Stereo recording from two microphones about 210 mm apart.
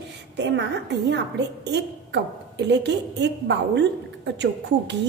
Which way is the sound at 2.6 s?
55° right (ahead or behind).